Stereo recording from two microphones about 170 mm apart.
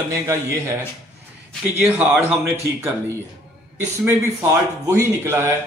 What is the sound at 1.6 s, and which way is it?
Speech, 10° right (ahead or behind).